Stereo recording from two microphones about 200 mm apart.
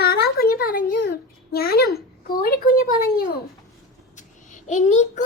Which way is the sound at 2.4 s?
45° left (ahead or behind).